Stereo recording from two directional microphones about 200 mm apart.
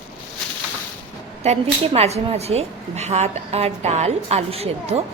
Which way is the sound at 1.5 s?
30° right (ahead or behind).